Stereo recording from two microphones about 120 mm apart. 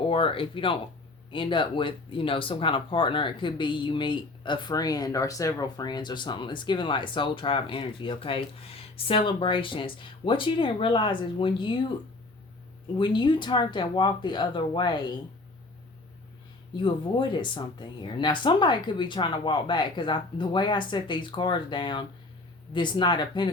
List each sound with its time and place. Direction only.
0.1 s speech: 50° left (ahead or behind)
13.0 s speech: 40° left (ahead or behind)
16.7 s speech: 40° left (ahead or behind)